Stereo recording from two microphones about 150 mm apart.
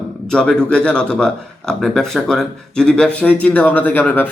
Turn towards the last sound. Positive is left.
turn(degrees=10)  # may be behind; listen again after turning